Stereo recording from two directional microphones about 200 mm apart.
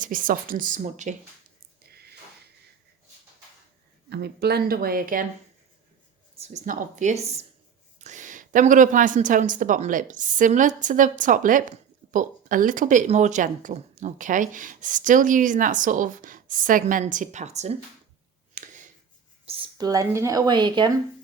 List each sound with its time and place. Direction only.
0.0 s speech: 45° right (ahead or behind)
4.1 s speech: 55° right (ahead or behind)
6.4 s a woman's voice: 35° right (ahead or behind)
18.5 s a sound: 40° right (ahead or behind)
19.5 s speech: 25° right (ahead or behind)